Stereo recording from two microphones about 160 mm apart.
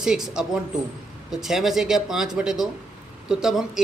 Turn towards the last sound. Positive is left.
turn(degrees=-5)  # may be behind; listen again after turning